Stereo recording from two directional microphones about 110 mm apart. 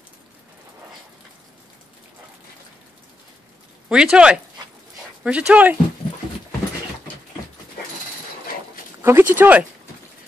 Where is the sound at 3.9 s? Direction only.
10° right (ahead or behind).